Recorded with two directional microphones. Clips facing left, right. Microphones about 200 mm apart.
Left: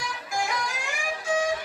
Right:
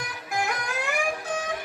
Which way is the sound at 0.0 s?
60° right (ahead or behind).